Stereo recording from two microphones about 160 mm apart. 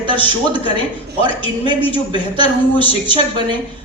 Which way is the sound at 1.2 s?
30° right (ahead or behind).